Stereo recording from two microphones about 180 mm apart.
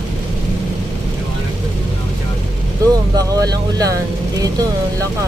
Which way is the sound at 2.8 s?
20° right (ahead or behind).